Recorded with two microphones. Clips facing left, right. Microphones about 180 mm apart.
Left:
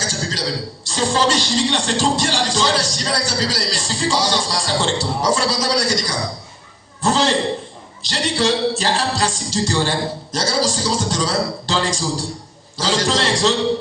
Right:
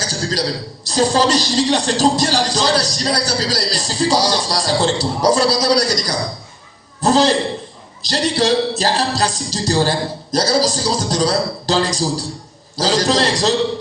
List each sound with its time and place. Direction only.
0.1 s throat clearing: 40° right (ahead or behind)
0.9 s music: 40° right (ahead or behind)